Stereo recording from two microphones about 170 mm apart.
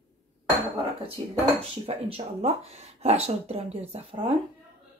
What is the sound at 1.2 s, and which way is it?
Speech, 30° right (ahead or behind).